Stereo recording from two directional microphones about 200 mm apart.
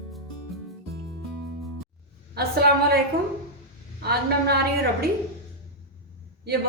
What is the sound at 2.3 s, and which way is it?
Speech, 50° right (ahead or behind).